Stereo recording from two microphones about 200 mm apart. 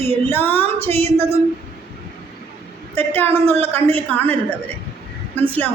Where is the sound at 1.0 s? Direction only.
30° right (ahead or behind).